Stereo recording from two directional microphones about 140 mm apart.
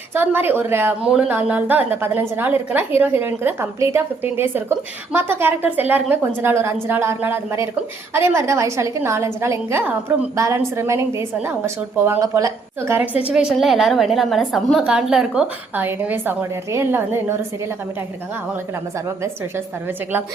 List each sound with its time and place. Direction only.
0.1 s a woman's voice: 15° right (ahead or behind)
13.3 s a woman's voice: 5° right (ahead or behind)
19.0 s a woman's voice: 20° right (ahead or behind)